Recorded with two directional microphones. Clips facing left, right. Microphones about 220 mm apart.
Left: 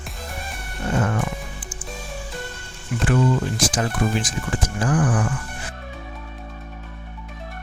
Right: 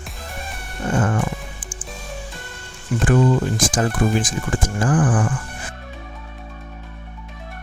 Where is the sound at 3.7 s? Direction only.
50° right (ahead or behind).